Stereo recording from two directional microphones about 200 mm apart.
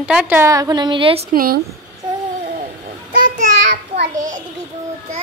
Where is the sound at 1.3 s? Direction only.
45° right (ahead or behind).